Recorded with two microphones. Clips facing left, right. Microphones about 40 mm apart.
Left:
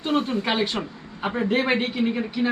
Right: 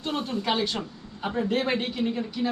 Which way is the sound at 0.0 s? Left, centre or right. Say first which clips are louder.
Left 6 dB; left.